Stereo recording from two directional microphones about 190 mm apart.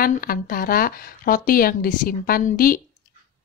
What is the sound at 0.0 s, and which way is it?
Speech, 50° left (ahead or behind).